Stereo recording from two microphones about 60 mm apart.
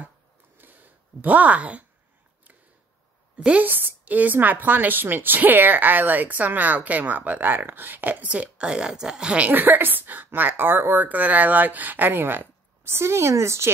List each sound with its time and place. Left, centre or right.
0.6 s a sound: right
3.3 s a woman's voice: centre
3.6 s a woman's voice: right; by 9.5 s centre
9.5 s speech: right